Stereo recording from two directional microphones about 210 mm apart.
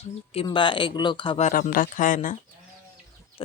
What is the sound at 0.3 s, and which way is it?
Speech, 25° left (ahead or behind).